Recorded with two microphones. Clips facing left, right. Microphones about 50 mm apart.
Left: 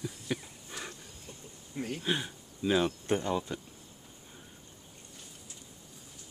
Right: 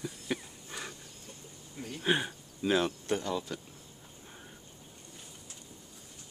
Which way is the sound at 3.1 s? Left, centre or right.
Left.